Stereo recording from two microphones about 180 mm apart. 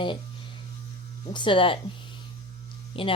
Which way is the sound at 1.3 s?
25° left (ahead or behind).